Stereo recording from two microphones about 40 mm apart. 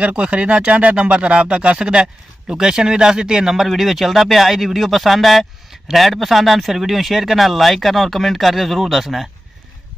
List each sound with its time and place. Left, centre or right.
0.0 s speech: right; by 3.6 s centre
3.6 s speech: centre